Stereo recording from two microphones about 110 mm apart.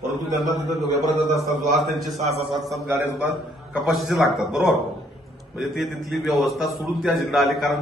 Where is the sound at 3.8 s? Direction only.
Centre (ahead or behind).